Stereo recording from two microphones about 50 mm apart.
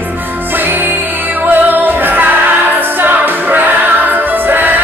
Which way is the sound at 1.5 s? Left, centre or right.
Right.